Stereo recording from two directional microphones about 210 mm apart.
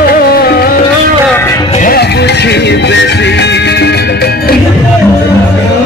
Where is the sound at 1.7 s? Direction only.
40° left (ahead or behind).